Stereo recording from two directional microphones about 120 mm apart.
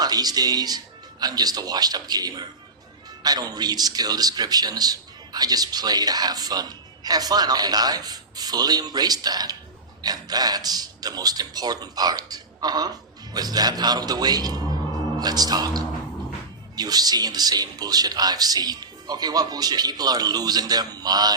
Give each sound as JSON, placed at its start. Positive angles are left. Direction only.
{"t": 0.0, "sound": "a man's voice", "side_deg": -35}